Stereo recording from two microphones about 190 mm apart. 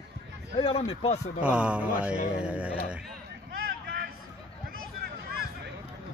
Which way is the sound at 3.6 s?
50° right (ahead or behind).